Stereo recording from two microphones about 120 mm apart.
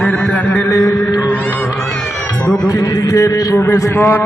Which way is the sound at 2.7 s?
30° left (ahead or behind).